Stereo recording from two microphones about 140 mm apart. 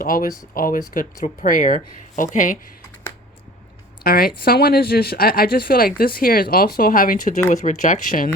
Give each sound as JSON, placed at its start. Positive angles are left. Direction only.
{"t": 0.0, "sound": "speech", "side_deg": 90}
{"t": 4.0, "sound": "speech", "side_deg": 90}
{"t": 7.5, "sound": "speech", "side_deg": 60}